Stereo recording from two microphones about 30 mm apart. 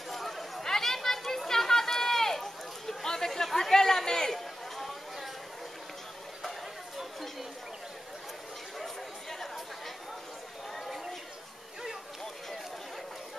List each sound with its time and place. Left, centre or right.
0.1 s chatter: centre
0.7 s a sound: centre
3.5 s chatter: centre
4.3 s chatter: centre
8.7 s chatter: centre